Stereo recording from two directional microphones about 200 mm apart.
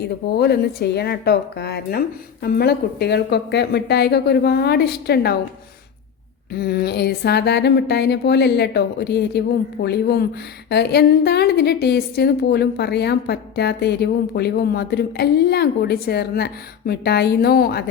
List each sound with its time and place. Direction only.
0.3 s a woman's voice: 50° left (ahead or behind)
6.6 s a woman's voice: 50° left (ahead or behind)